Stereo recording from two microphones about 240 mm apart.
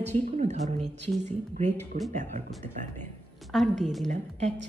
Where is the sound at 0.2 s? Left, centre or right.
Right.